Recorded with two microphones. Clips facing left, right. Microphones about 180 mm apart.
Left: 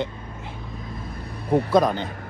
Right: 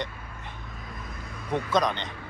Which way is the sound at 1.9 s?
45° left (ahead or behind).